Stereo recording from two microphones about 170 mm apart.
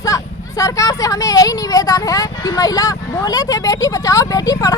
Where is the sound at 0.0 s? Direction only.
20° left (ahead or behind).